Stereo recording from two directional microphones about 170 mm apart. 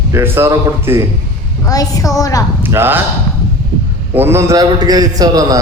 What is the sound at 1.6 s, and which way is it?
Speech, 20° left (ahead or behind).